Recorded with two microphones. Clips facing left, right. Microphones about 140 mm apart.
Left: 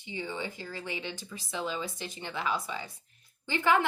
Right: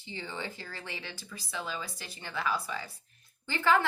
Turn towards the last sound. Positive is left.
turn(degrees=20)  # may be behind; listen again after turning